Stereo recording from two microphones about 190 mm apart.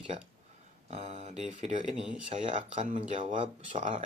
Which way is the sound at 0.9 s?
35° right (ahead or behind).